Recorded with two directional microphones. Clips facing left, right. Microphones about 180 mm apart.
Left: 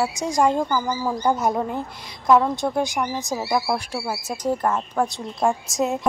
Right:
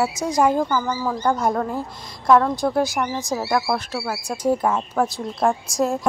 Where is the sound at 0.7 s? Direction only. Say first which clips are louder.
Right 1 dB; 10° left (ahead or behind).